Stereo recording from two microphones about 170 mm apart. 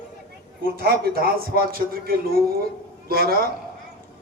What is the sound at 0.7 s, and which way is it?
A man's voice, 65° right (ahead or behind).